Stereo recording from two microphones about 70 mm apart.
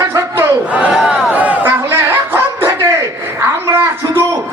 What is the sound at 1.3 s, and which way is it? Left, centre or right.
Chatter, right.